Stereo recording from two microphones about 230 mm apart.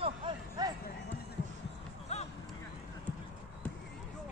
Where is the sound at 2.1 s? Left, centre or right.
Left.